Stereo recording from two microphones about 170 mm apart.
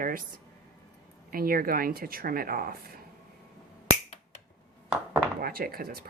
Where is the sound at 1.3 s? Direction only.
60° right (ahead or behind).